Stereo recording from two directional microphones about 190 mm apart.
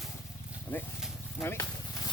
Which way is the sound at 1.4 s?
15° left (ahead or behind).